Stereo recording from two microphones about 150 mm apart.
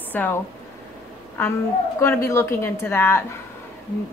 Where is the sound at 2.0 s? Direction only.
15° left (ahead or behind).